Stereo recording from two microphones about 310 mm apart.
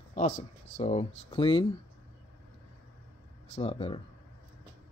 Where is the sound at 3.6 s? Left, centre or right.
Centre.